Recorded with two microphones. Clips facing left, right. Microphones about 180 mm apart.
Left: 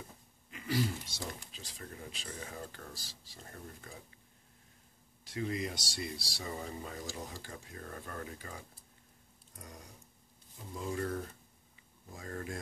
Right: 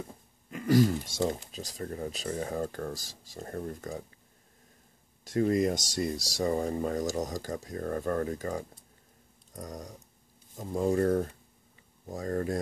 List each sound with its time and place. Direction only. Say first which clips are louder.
0.5 s speech: right 10 dB; 45° right (ahead or behind)
5.2 s speech: right 11 dB; 45° right (ahead or behind)